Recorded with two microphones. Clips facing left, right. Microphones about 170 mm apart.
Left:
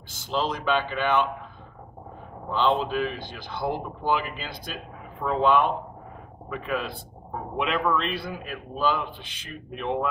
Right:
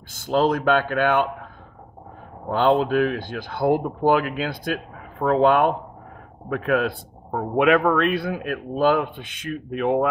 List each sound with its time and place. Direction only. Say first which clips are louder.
0.1 s speech: right 8 dB; 55° right (ahead or behind)
2.5 s speech: right 5 dB; 50° right (ahead or behind)
7.3 s speech: right 10 dB; 70° right (ahead or behind)
7.8 s speech: right 6 dB; 55° right (ahead or behind)